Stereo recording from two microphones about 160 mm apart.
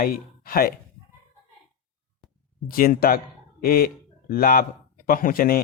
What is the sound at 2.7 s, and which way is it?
Speech, 65° left (ahead or behind).